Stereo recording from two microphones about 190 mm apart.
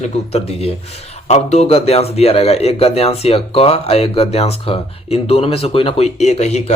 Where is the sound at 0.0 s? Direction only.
35° left (ahead or behind).